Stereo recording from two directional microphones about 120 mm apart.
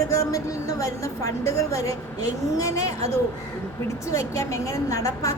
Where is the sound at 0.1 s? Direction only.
30° left (ahead or behind).